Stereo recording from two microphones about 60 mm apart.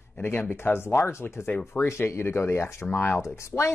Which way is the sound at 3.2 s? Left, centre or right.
Left.